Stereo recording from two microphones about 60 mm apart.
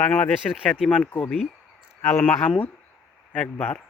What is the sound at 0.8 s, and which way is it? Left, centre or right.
Speech, centre.